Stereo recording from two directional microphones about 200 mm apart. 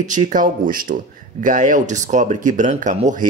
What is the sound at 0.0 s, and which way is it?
Speech, 40° right (ahead or behind).